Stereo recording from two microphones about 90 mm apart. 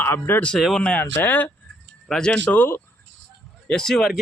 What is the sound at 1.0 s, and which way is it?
Speech, 20° left (ahead or behind).